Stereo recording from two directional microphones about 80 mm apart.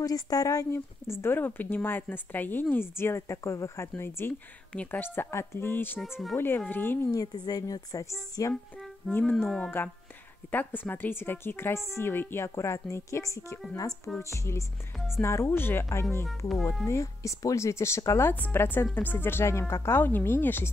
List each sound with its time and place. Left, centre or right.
0.0 s a woman's voice: left
0.7 s a woman's voice: left
6.0 s speech: centre
6.3 s a woman's voice: left
7.1 s a woman's voice: left
9.1 s speech: centre
9.8 s a woman's voice: left
12.4 s a woman's voice: left
18.3 s a woman's voice: left